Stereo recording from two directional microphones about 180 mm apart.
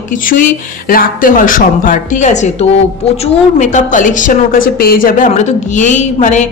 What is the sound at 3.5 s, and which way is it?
A man's voice, 45° left (ahead or behind).